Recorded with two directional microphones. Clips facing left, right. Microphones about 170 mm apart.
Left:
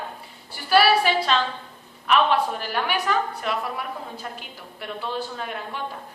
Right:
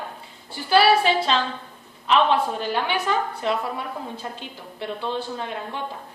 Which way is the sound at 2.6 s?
25° right (ahead or behind).